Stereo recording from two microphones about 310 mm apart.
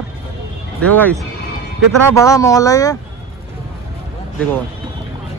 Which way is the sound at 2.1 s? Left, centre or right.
Centre.